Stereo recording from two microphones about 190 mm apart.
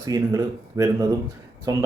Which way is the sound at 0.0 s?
15° right (ahead or behind).